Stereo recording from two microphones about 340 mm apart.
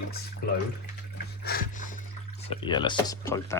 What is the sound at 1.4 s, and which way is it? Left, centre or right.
Speech, left.